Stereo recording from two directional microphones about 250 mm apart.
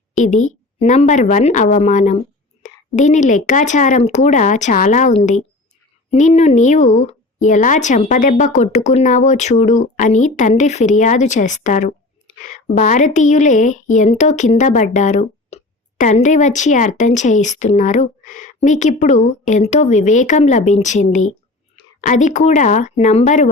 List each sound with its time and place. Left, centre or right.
0.2 s speech: left